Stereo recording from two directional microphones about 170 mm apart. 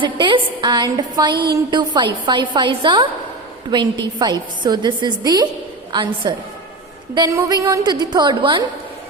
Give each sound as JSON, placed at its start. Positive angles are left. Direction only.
{"t": 0.0, "sound": "a woman's voice", "side_deg": -30}
{"t": 1.3, "sound": "a woman's voice", "side_deg": -70}
{"t": 1.7, "sound": "a woman's voice", "side_deg": -25}